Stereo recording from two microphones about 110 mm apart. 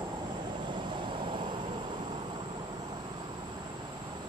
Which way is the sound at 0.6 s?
45° right (ahead or behind).